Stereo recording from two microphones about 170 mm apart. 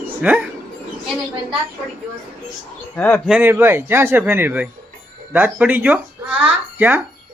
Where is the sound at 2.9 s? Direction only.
10° left (ahead or behind).